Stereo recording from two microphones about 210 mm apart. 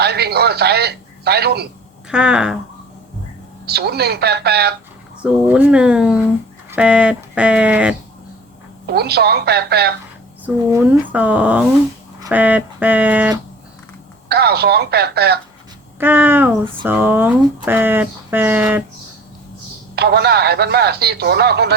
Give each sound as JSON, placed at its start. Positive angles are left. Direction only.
{"t": 0.0, "sound": "telephone", "side_deg": -50}
{"t": 2.0, "sound": "speech", "side_deg": -5}
{"t": 3.7, "sound": "speech", "side_deg": -50}
{"t": 5.2, "sound": "speech", "side_deg": -10}
{"t": 9.0, "sound": "speech", "side_deg": -50}
{"t": 10.4, "sound": "speech", "side_deg": -10}
{"t": 14.3, "sound": "speech", "side_deg": -50}
{"t": 16.0, "sound": "speech", "side_deg": -10}
{"t": 20.0, "sound": "speech", "side_deg": -50}